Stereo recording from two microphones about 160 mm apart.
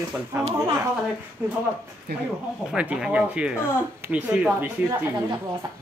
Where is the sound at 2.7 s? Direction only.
5° right (ahead or behind).